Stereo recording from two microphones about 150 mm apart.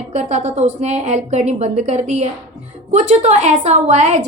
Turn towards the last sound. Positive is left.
turn(degrees=-50)  # may be behind; listen again after turning